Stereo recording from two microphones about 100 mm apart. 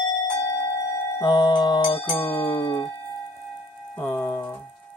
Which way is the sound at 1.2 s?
45° left (ahead or behind).